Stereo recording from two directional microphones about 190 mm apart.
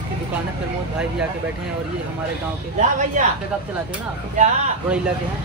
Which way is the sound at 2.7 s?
40° right (ahead or behind).